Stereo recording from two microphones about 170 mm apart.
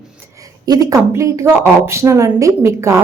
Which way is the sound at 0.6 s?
20° right (ahead or behind).